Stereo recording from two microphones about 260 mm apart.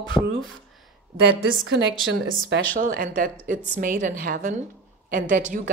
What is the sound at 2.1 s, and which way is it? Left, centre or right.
Speech, right.